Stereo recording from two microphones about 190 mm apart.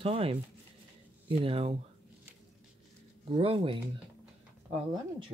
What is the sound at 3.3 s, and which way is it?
Speech, 25° right (ahead or behind).